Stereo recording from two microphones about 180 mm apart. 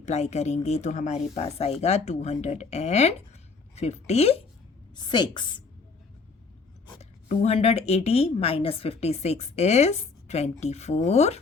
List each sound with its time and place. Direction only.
0.0 s speech: 40° left (ahead or behind)
4.9 s a woman's voice: 25° left (ahead or behind)
7.0 s speech: 35° left (ahead or behind)